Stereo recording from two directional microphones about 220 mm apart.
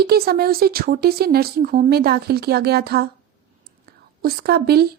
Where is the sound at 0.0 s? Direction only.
45° right (ahead or behind).